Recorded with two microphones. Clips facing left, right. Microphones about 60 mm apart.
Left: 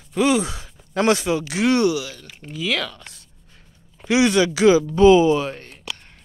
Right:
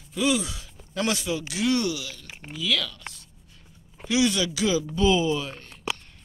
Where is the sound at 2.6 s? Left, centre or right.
Left.